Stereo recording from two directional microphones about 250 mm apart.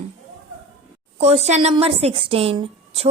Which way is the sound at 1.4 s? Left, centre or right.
Right.